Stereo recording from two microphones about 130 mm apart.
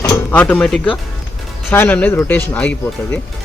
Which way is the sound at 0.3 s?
10° left (ahead or behind).